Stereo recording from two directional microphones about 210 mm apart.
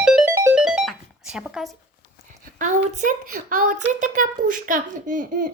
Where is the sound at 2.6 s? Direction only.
35° right (ahead or behind).